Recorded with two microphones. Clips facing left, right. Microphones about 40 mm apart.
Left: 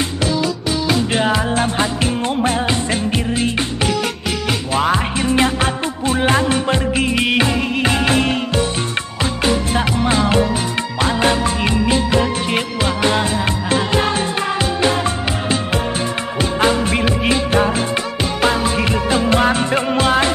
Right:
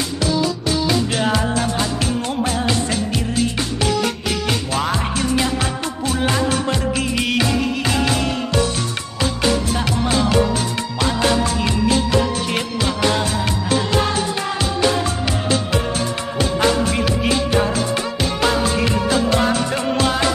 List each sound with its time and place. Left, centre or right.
0.8 s music: left
9.2 s music: left
16.3 s music: left
18.4 s music: left